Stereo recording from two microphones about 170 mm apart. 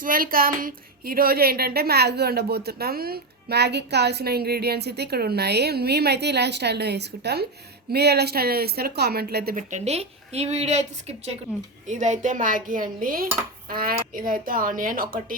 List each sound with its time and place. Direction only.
0.0 s a woman's voice: 55° right (ahead or behind)
9.7 s a woman's voice: 40° right (ahead or behind)
11.9 s a woman's voice: 45° right (ahead or behind)